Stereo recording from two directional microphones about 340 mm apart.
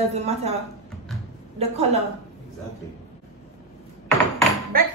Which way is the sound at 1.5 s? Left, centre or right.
Centre.